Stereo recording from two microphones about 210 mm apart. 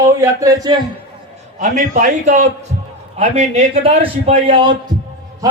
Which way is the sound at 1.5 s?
35° right (ahead or behind).